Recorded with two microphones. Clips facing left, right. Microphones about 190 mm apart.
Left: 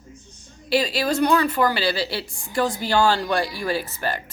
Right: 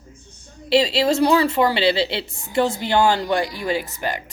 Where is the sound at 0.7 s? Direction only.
25° right (ahead or behind).